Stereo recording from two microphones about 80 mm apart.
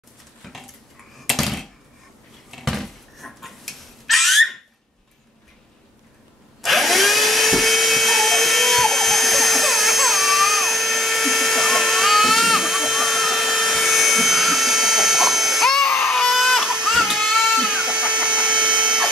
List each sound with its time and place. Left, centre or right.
0.4 s dishes: centre
1.2 s a sound: centre
6.6 s drill: centre